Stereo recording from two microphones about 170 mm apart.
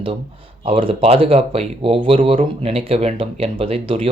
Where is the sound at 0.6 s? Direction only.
30° right (ahead or behind).